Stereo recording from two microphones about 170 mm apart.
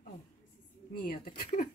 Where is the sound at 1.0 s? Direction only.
60° left (ahead or behind).